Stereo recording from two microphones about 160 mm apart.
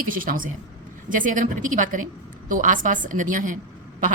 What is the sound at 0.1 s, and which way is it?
A woman's voice, 60° right (ahead or behind).